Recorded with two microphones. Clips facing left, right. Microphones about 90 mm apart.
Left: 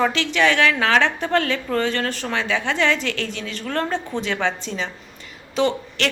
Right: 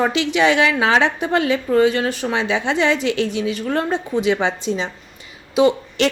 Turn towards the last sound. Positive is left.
turn(degrees=-15)  # may be behind; listen again after turning